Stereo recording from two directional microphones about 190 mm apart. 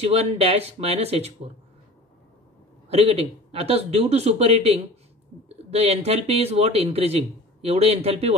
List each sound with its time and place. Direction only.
0.0 s speech: 35° right (ahead or behind)
2.9 s speech: 30° right (ahead or behind)